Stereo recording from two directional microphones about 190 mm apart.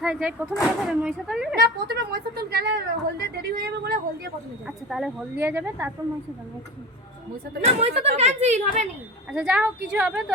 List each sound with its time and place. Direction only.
0.0 s speech: 5° right (ahead or behind)
1.5 s a woman's voice: 55° right (ahead or behind)
4.6 s speech: centre (ahead or behind)
7.6 s speech: 35° right (ahead or behind)
9.3 s speech: 5° right (ahead or behind)